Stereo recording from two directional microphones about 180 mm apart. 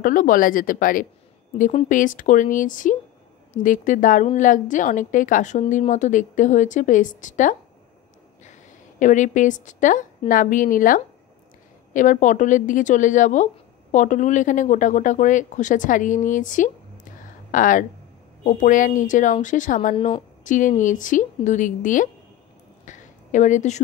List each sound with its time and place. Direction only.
0.0 s a woman's voice: 50° left (ahead or behind)
9.0 s a woman's voice: 45° left (ahead or behind)
22.8 s a sound: 45° left (ahead or behind)